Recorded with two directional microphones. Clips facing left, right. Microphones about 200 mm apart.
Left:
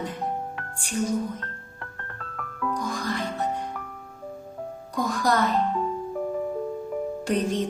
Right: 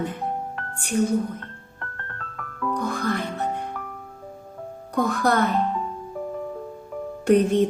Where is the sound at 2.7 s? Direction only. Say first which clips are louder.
Right 5 dB; 60° right (ahead or behind).